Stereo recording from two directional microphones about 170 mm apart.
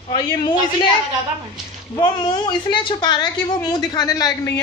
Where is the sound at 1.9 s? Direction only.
25° left (ahead or behind).